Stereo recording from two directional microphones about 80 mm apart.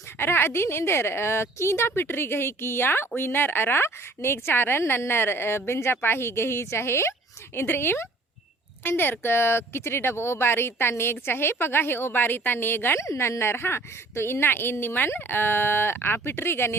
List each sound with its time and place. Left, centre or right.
0.2 s a woman's voice: left